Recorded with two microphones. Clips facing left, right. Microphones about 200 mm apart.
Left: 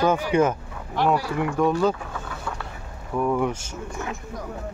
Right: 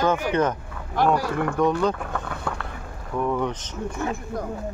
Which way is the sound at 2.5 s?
60° right (ahead or behind).